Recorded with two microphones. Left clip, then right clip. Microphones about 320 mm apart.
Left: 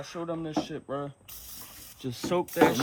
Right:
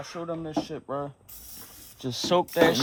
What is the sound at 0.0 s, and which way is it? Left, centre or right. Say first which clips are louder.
Speech: right 1 dB; centre.